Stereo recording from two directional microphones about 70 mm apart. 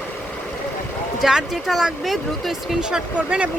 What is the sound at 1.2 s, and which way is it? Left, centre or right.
Speech, centre.